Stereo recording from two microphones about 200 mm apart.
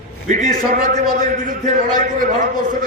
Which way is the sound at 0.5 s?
40° right (ahead or behind).